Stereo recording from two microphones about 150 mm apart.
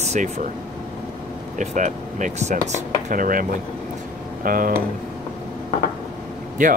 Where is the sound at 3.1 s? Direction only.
65° right (ahead or behind).